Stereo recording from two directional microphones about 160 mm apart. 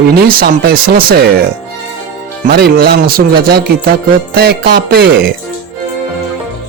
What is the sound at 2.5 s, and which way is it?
A man's voice, 85° right.